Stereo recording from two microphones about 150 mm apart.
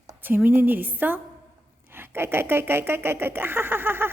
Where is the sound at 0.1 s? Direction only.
15° right (ahead or behind).